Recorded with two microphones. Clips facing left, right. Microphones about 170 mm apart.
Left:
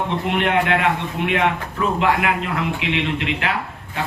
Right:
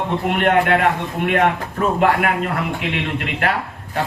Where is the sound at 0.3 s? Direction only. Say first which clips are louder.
Right 3 dB; 50° right (ahead or behind).